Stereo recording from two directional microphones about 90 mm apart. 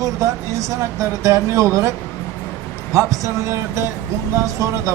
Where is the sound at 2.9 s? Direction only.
35° right (ahead or behind).